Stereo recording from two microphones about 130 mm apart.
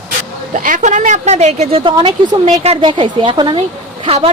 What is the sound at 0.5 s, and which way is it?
A woman's voice, 80° right.